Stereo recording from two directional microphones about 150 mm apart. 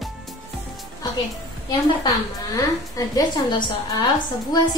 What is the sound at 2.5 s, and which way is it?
A woman's voice, 25° left (ahead or behind).